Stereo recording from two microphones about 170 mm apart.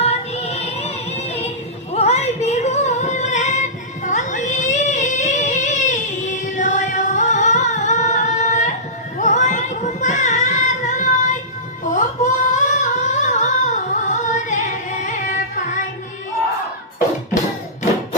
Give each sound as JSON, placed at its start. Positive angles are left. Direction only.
{"t": 0.0, "sound": "music", "side_deg": 40}
{"t": 9.1, "sound": "child singing", "side_deg": 45}
{"t": 11.9, "sound": "humming", "side_deg": 45}